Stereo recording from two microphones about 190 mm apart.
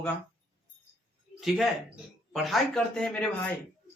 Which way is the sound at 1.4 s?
Centre (ahead or behind).